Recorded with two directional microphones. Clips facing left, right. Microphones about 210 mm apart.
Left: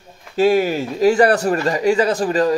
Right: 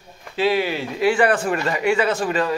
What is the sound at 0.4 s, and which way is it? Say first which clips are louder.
Speech: left 5 dB; 45° left (ahead or behind).